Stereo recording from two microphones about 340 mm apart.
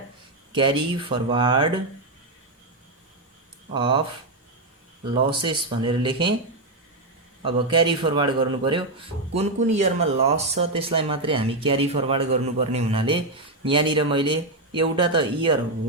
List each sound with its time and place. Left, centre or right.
0.5 s speech: centre
3.7 s speech: centre
5.3 s speech: centre
7.4 s speech: centre